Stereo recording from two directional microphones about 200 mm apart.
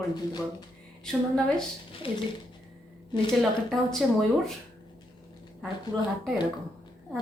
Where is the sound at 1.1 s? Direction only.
5° left (ahead or behind).